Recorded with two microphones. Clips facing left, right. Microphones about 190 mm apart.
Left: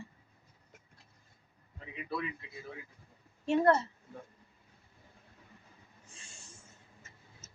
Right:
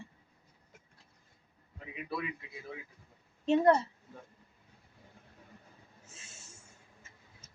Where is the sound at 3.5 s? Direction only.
15° right (ahead or behind).